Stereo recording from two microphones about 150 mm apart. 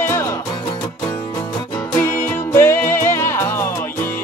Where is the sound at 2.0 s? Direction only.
15° left (ahead or behind).